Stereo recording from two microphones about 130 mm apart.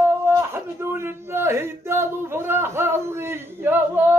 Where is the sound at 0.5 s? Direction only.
15° right (ahead or behind).